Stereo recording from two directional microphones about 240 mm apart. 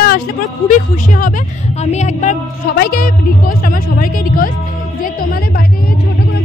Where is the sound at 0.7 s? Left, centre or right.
Left.